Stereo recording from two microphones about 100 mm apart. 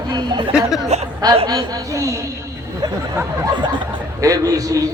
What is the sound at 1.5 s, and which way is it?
Speech, 35° right (ahead or behind).